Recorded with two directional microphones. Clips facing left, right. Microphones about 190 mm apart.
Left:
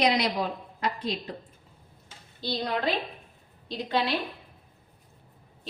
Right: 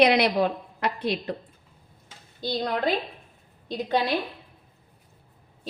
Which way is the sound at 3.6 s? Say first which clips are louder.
Right 5 dB; 45° right (ahead or behind).